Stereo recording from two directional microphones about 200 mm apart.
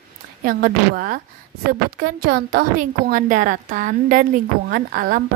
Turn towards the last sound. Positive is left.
turn(degrees=-45)  # may be behind; listen again after turning